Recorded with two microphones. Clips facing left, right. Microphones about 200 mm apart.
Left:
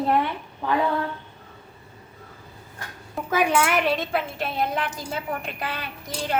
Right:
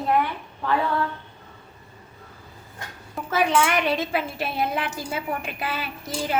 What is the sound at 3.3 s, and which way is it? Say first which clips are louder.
A woman's voice: even; 10° left (ahead or behind).